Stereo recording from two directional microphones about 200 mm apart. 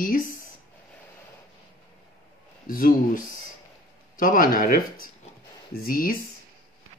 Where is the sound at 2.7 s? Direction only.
45° left (ahead or behind).